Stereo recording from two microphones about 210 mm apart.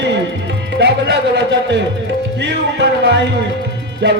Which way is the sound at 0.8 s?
55° right (ahead or behind).